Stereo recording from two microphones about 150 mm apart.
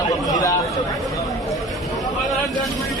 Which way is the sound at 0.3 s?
25° left (ahead or behind).